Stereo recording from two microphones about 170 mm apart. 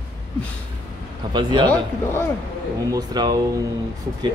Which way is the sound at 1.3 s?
25° right (ahead or behind).